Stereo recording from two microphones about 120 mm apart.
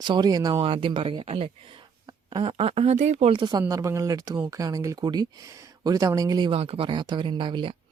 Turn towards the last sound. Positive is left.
turn(degrees=-45)  # may be behind; listen again after turning